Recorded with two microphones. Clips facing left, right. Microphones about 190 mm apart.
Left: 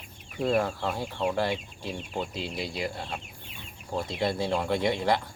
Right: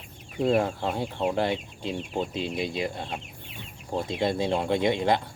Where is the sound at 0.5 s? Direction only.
20° right (ahead or behind).